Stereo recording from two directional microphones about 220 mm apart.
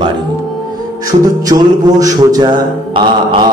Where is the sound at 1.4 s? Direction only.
15° right (ahead or behind).